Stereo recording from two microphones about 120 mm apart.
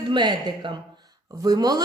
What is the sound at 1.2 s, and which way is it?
Speech, 30° right (ahead or behind).